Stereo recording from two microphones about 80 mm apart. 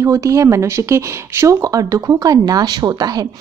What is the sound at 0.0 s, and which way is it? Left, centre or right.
Speech, right.